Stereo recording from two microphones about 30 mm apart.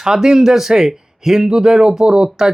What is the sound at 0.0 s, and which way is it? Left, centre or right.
Speech, right.